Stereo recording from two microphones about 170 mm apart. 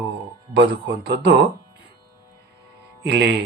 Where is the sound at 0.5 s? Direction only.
90° right.